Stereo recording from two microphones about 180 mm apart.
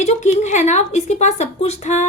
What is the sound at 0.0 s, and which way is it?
Speech, 40° left (ahead or behind).